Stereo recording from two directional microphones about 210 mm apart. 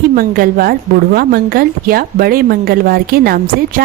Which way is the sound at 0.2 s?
45° right (ahead or behind).